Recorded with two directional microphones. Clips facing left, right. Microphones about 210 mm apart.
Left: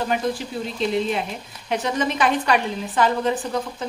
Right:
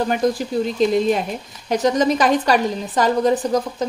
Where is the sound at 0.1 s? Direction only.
40° right (ahead or behind).